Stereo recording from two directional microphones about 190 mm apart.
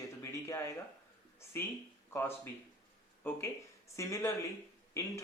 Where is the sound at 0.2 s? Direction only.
15° left (ahead or behind).